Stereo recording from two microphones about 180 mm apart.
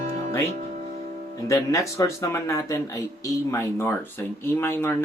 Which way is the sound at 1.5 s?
15° left (ahead or behind).